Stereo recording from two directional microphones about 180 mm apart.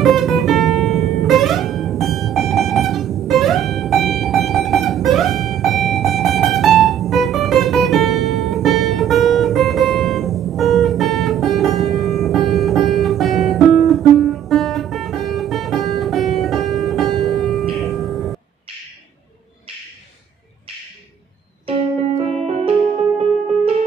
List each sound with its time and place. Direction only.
0.0 s music: centre (ahead or behind)
21.6 s music: 35° right (ahead or behind)